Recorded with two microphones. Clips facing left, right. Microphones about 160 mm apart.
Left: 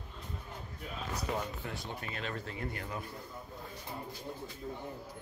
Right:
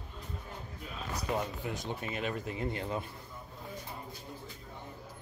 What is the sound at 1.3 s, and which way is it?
Speech, 15° right (ahead or behind).